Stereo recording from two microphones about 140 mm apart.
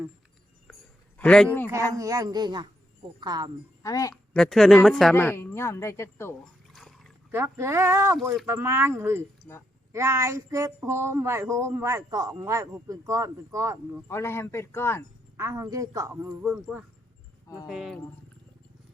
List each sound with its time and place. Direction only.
1.2 s speech: 5° left (ahead or behind)
1.6 s speech: 20° right (ahead or behind)
3.8 s a woman's voice: 25° left (ahead or behind)
4.1 s a woman's voice: 5° left (ahead or behind)
5.1 s speech: 15° left (ahead or behind)
6.7 s dog: centre (ahead or behind)
7.3 s speech: 15° right (ahead or behind)
14.1 s speech: 20° left (ahead or behind)
15.4 s speech: 20° right (ahead or behind)
16.4 s a woman's voice: 5° right (ahead or behind)